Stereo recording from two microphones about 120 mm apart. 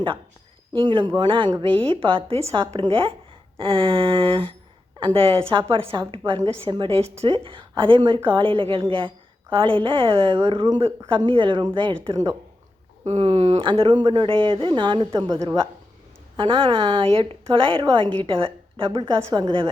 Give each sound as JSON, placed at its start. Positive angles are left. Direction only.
{"t": 0.7, "sound": "a woman's voice", "side_deg": -40}
{"t": 12.1, "sound": "speech", "side_deg": -30}
{"t": 13.1, "sound": "speech", "side_deg": -65}
{"t": 13.6, "sound": "a woman's voice", "side_deg": -45}
{"t": 16.4, "sound": "a woman's voice", "side_deg": -45}